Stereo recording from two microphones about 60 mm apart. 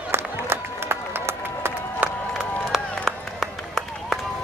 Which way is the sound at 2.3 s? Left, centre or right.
Centre.